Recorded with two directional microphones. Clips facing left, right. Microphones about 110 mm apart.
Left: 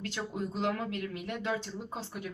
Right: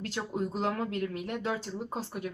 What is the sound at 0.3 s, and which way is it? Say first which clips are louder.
Speech: right 2 dB; 40° right (ahead or behind).